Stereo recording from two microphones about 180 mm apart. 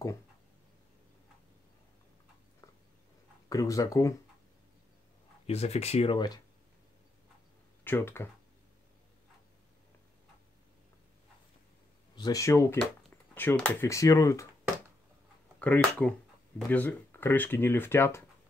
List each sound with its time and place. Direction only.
3.4 s speech: 20° left (ahead or behind)
5.5 s speech: 35° left (ahead or behind)
6.1 s speech: 20° left (ahead or behind)
7.8 s speech: 10° left (ahead or behind)
12.2 s speech: 20° left (ahead or behind)
15.6 s speech: 5° left (ahead or behind)